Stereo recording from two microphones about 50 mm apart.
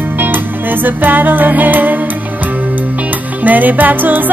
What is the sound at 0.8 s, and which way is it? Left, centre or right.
Music, right.